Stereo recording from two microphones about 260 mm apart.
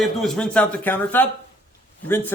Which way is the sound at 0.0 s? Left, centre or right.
Centre.